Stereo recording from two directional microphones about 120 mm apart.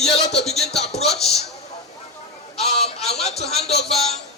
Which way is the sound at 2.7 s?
60° left (ahead or behind).